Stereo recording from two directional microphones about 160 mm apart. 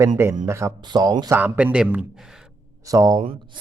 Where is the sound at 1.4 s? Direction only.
10° right (ahead or behind).